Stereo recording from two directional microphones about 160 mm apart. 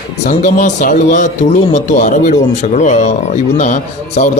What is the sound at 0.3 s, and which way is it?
Speech, 50° left (ahead or behind).